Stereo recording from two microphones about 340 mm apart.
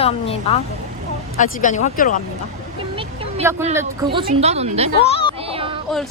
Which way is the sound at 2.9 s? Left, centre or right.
Centre.